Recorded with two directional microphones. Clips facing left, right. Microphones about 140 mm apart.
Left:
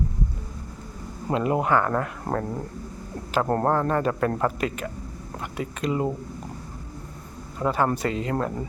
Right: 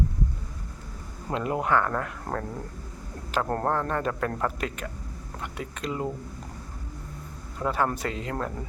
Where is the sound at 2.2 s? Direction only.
15° left (ahead or behind).